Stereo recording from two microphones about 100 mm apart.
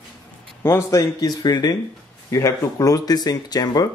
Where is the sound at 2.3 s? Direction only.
30° left (ahead or behind).